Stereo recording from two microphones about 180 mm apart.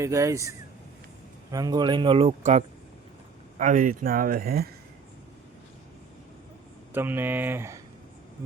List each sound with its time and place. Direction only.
0.0 s speech: 15° right (ahead or behind); by 4.7 s 60° right (ahead or behind)
6.9 s speech: 10° right (ahead or behind)